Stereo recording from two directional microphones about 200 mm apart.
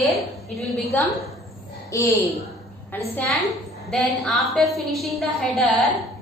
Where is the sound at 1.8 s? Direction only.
15° left (ahead or behind).